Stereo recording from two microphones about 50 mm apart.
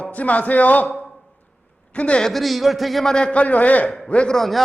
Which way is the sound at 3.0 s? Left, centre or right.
Centre.